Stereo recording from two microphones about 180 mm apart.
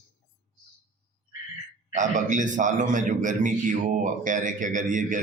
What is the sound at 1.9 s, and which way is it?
Speech, 45° right (ahead or behind).